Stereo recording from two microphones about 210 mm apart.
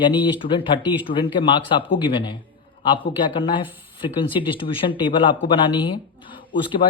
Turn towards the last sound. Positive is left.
turn(degrees=25)  # may be behind; listen again after turning